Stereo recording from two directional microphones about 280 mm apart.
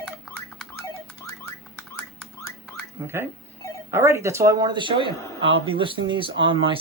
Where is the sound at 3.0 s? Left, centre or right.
Centre.